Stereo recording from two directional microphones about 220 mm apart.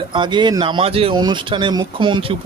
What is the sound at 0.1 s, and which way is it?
Speech, 20° right (ahead or behind).